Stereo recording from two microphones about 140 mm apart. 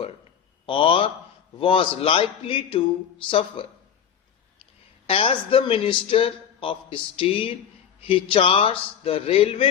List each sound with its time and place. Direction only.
0.6 s speech: 40° left (ahead or behind)
5.0 s speech: 45° left (ahead or behind)